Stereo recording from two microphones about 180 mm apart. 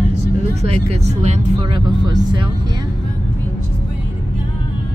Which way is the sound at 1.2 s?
40° right (ahead or behind).